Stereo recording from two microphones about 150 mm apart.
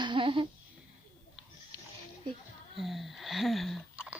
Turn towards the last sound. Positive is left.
turn(degrees=0)  # may be behind; listen again after turning